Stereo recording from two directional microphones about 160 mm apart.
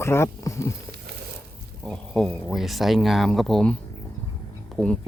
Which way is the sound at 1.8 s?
5° left (ahead or behind).